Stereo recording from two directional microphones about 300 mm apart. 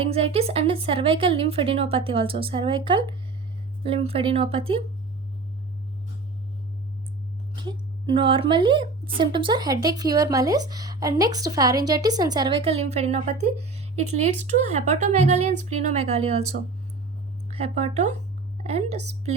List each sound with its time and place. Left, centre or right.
0.0 s a woman's voice: centre
7.5 s a woman's voice: centre
17.5 s a woman's voice: centre